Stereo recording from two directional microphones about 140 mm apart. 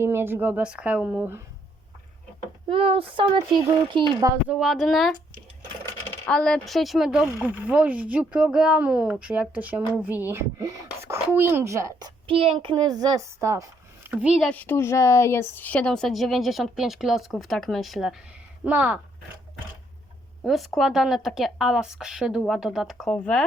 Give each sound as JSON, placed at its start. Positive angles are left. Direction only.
{"t": 0.0, "sound": "speech", "side_deg": -15}
{"t": 2.6, "sound": "speech", "side_deg": -40}
{"t": 3.9, "sound": "a woman's voice", "side_deg": 0}
{"t": 6.2, "sound": "a woman's voice", "side_deg": 5}
{"t": 14.1, "sound": "speech", "side_deg": -10}
{"t": 14.4, "sound": "a woman's voice", "side_deg": 10}
{"t": 20.4, "sound": "a woman's voice", "side_deg": 0}
{"t": 23.1, "sound": "speech", "side_deg": 10}